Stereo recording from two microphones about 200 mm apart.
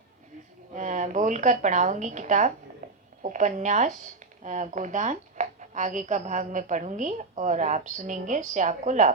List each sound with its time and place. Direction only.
0.7 s a woman's voice: 40° right (ahead or behind)